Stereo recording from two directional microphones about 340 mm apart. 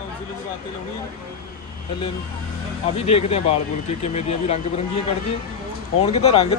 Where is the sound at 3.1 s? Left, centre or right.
Centre.